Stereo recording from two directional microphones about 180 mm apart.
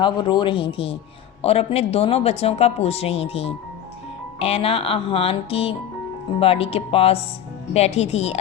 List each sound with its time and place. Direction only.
0.0 s speech: 25° left (ahead or behind)